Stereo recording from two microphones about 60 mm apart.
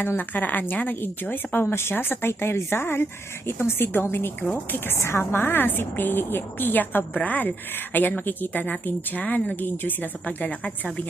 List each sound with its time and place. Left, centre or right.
0.0 s speech: left